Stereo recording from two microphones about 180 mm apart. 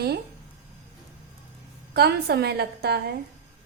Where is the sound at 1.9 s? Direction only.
65° right (ahead or behind).